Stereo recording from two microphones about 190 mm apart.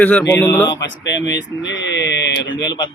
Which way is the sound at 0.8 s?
70° left (ahead or behind).